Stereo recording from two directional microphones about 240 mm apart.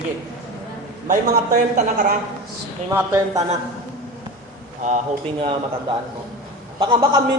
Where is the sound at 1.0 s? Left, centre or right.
Right.